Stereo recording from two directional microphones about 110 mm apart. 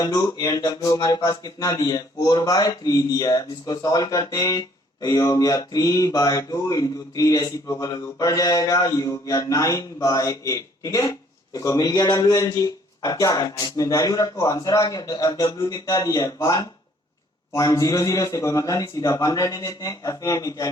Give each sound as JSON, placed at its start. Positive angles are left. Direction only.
{"t": 0.0, "sound": "speech", "side_deg": 30}